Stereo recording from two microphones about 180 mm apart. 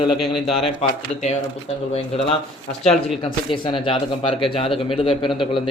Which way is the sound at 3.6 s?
30° left (ahead or behind).